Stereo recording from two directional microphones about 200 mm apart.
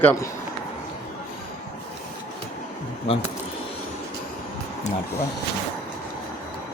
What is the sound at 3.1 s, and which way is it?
Speech, 30° left (ahead or behind).